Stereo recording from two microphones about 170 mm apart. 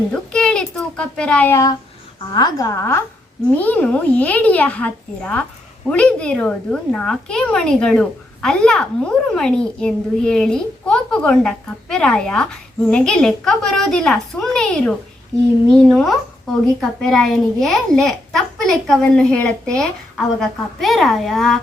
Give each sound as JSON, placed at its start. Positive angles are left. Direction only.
{"t": 0.1, "sound": "a woman's voice", "side_deg": 5}